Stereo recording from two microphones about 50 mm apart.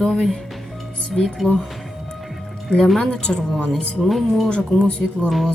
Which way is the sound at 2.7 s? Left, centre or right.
Centre.